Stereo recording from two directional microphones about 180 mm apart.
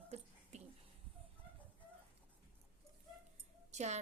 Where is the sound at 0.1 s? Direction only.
35° right (ahead or behind).